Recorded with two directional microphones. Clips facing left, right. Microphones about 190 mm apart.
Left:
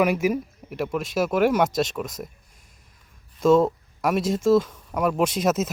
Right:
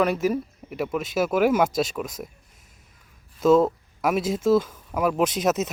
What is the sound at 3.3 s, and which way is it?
Speech, 5° right (ahead or behind).